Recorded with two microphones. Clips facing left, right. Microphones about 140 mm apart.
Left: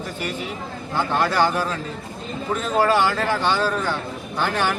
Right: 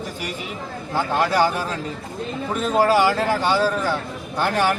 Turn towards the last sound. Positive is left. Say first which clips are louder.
# right 2 dB
turn(degrees=-10)  # may be behind; listen again after turning